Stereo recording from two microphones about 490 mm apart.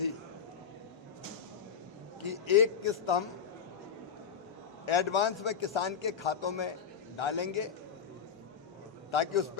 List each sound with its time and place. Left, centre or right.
2.2 s a man's voice: left
4.9 s a man's voice: left
9.1 s a man's voice: left